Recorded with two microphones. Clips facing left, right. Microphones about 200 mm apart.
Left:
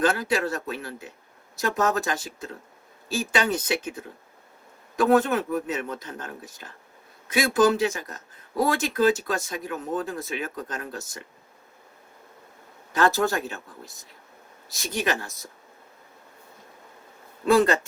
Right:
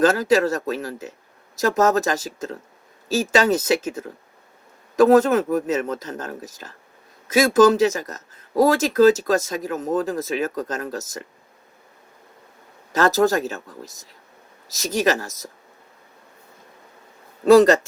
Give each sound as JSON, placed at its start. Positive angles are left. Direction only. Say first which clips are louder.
{"t": 0.0, "sound": "speech", "louder": "right 7 dB", "side_deg": -40}
{"t": 4.9, "sound": "speech", "louder": "right 6 dB", "side_deg": -40}
{"t": 12.9, "sound": "speech", "louder": "right 5 dB", "side_deg": -40}
{"t": 14.8, "sound": "speech", "louder": "right 7 dB", "side_deg": -40}
{"t": 17.4, "sound": "speech", "louder": "right 8 dB", "side_deg": -40}